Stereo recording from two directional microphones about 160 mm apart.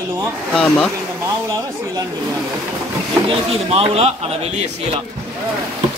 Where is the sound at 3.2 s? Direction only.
35° right (ahead or behind).